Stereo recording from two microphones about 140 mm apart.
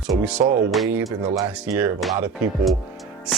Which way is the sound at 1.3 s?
20° right (ahead or behind).